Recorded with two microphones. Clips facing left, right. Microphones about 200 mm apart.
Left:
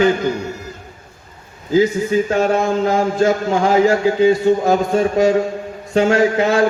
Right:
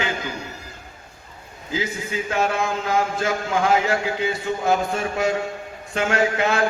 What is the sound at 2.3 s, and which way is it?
A man's voice, 45° left (ahead or behind).